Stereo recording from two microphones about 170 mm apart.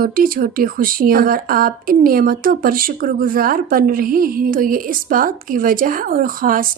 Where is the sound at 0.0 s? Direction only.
55° right (ahead or behind).